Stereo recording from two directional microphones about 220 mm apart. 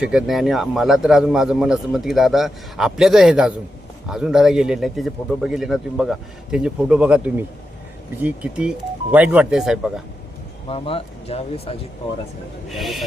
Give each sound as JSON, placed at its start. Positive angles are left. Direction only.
{"t": 0.0, "sound": "a man's voice", "side_deg": -5}
{"t": 10.7, "sound": "speech", "side_deg": 25}
{"t": 12.6, "sound": "a man's voice", "side_deg": 0}